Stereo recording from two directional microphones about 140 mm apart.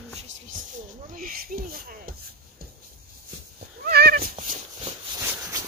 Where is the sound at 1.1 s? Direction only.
85° right.